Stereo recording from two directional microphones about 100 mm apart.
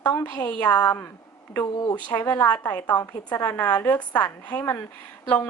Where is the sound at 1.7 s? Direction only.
45° left (ahead or behind).